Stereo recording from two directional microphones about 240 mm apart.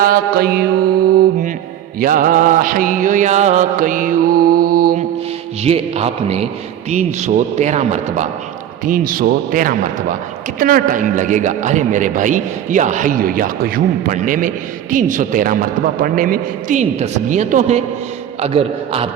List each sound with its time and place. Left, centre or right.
0.0 s a man's voice: right
2.0 s mantra: right
5.6 s a man's voice: right